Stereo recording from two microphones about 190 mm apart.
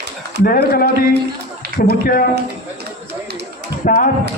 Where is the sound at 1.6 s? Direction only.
60° right (ahead or behind).